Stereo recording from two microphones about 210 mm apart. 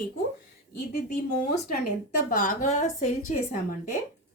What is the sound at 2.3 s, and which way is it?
A woman's voice, 40° left (ahead or behind).